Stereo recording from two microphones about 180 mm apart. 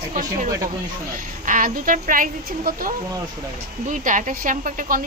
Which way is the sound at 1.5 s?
45° right (ahead or behind).